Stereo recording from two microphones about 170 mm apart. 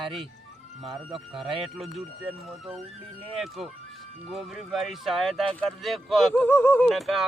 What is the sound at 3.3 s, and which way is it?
Speech, centre (ahead or behind).